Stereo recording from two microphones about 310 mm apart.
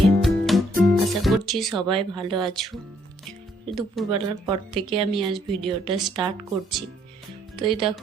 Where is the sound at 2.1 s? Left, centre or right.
Centre.